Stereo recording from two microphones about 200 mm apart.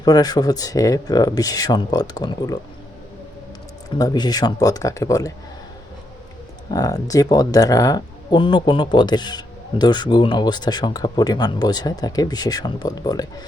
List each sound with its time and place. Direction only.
0.0 s speech: 20° left (ahead or behind)
3.8 s speech: 20° left (ahead or behind)
6.7 s speech: 20° left (ahead or behind)